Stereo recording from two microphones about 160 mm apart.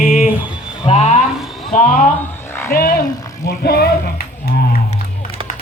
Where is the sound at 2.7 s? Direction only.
70° left (ahead or behind).